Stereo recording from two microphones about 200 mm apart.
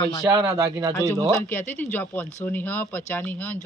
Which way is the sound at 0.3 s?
20° right (ahead or behind).